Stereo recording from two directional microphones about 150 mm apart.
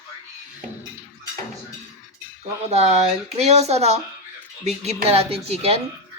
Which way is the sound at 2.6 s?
45° right (ahead or behind).